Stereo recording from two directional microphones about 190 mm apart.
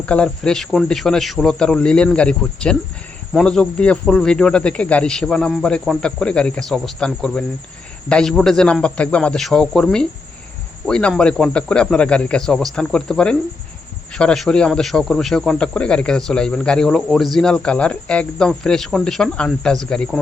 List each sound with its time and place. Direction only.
0.0 s speech: 5° left (ahead or behind)